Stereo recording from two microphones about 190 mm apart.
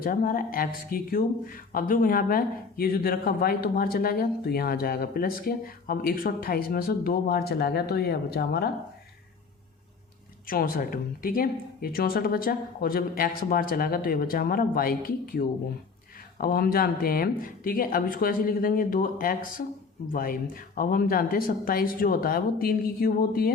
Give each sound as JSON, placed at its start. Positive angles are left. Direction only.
{"t": 0.0, "sound": "speech", "side_deg": 50}
{"t": 10.4, "sound": "speech", "side_deg": 50}